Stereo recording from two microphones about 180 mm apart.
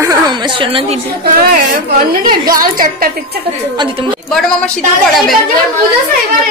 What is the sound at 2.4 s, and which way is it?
Speech, 50° right (ahead or behind).